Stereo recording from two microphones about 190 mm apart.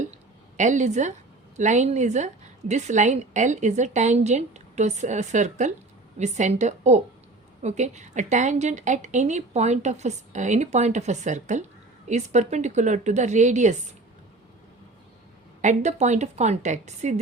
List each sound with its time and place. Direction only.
0.0 s a sound: 40° right (ahead or behind)
1.5 s a woman's voice: 40° right (ahead or behind)
15.6 s a woman's voice: 40° right (ahead or behind)